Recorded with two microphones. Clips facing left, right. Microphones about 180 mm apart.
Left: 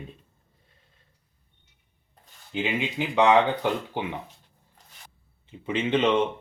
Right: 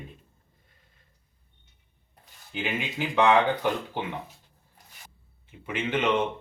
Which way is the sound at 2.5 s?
15° left (ahead or behind).